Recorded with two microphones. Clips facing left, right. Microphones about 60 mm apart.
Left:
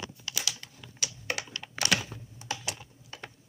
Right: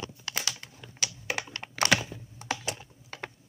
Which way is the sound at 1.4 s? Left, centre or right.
Right.